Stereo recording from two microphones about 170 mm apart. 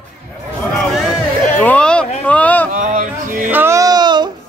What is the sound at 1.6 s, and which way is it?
Speech, 5° left (ahead or behind).